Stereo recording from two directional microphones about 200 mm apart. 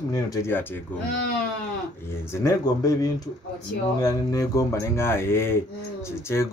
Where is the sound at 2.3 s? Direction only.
15° left (ahead or behind).